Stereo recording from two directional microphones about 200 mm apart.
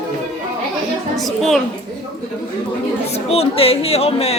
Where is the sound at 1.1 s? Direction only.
Centre (ahead or behind).